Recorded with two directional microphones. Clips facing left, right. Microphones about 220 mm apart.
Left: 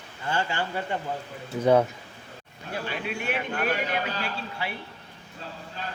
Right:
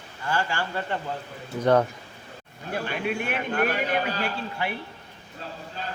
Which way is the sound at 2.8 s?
50° right (ahead or behind).